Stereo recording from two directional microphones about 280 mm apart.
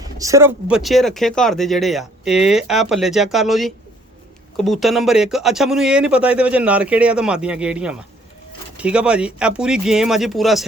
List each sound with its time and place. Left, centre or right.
0.0 s speech: centre